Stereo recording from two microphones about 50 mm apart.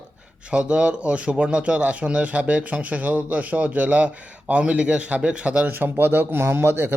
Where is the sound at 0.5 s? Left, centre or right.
Right.